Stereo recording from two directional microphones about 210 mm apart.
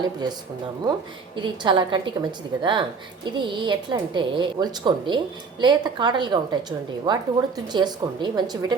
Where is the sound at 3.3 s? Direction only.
20° right (ahead or behind).